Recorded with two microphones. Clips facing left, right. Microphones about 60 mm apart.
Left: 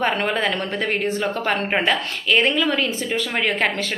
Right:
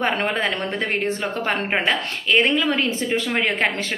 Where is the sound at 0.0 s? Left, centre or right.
Right.